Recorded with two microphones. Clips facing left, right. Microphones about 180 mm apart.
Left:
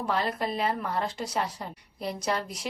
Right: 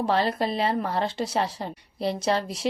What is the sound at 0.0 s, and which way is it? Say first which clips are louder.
Speech: right 5 dB; 30° right (ahead or behind).